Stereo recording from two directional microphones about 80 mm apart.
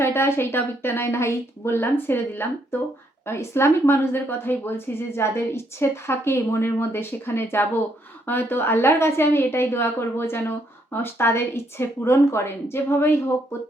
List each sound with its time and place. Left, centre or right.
0.0 s speech: left